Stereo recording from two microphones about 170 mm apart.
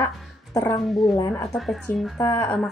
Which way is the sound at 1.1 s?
20° left (ahead or behind).